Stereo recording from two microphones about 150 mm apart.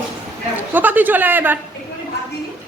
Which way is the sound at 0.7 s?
10° right (ahead or behind).